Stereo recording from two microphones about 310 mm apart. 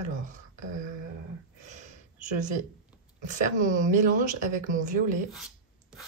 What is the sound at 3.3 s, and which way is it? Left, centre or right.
A woman's voice, right.